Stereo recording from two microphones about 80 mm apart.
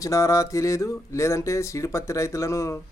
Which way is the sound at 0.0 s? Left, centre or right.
Left.